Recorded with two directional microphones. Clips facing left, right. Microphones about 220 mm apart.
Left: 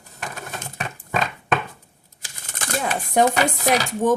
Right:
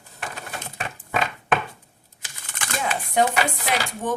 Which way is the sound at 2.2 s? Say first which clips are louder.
Left 3 dB; 40° left (ahead or behind).